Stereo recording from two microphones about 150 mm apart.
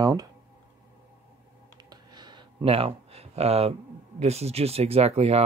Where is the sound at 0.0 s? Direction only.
25° right (ahead or behind).